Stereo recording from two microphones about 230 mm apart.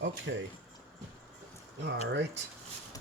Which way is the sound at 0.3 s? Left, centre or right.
Right.